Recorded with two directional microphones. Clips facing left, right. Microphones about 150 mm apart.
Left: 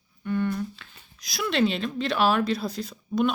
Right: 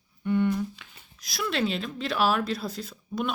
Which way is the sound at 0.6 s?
10° right (ahead or behind).